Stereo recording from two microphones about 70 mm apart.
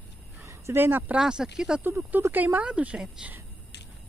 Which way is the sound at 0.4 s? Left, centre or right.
Right.